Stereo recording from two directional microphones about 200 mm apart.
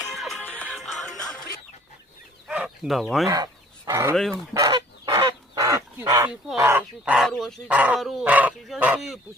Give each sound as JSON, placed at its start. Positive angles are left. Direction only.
{"t": 0.1, "sound": "music", "side_deg": 0}
{"t": 2.5, "sound": "chicken", "side_deg": -5}
{"t": 3.2, "sound": "speech", "side_deg": -15}
{"t": 4.1, "sound": "goose", "side_deg": 0}
{"t": 4.5, "sound": "goose", "side_deg": -20}